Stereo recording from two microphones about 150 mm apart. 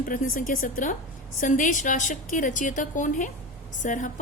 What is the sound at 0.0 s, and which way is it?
A woman's voice, 65° left (ahead or behind).